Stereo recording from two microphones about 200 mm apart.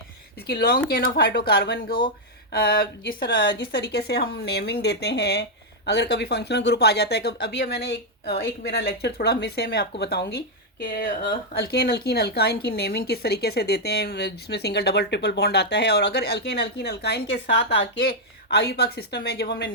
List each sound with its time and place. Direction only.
0.4 s speech: 55° left (ahead or behind)